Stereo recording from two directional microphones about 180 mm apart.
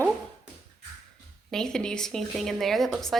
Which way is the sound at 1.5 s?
5° left (ahead or behind).